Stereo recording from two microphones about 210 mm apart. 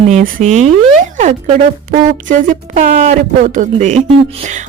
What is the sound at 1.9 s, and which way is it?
Speech, 35° right (ahead or behind).